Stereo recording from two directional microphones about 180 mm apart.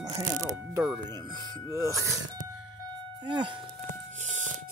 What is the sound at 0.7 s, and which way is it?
Speech, 10° right (ahead or behind).